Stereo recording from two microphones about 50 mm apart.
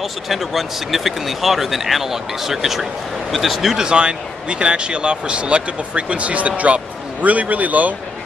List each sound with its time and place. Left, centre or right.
0.0 s speech: centre
3.8 s speech: centre